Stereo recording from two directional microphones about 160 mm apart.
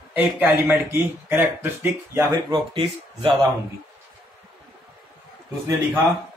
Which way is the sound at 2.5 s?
35° right (ahead or behind).